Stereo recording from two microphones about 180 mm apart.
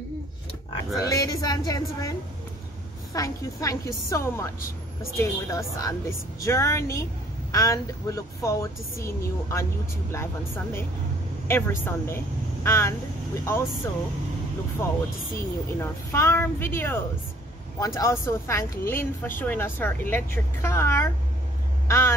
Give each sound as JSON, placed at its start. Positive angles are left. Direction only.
{"t": 0.9, "sound": "a woman's voice", "side_deg": 20}
{"t": 15.3, "sound": "speech", "side_deg": 15}